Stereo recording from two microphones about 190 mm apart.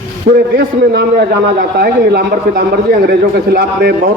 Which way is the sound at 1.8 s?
60° right (ahead or behind).